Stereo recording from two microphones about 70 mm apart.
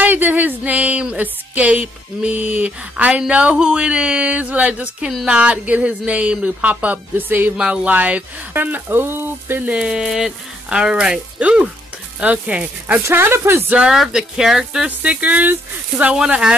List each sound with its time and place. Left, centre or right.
0.0 s music: right
3.1 s a woman's voice: centre
7.5 s a woman's voice: centre; by 9.6 s right
9.7 s a woman's voice: centre
13.1 s speech: right
13.7 s speech: centre
14.9 s a woman's voice: right
16.3 s speech: centre